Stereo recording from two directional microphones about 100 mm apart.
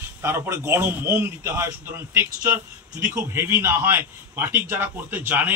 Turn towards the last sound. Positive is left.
turn(degrees=-20)  # may be behind; listen again after turning